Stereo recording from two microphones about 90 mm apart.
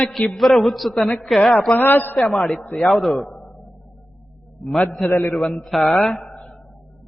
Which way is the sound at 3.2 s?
10° left (ahead or behind).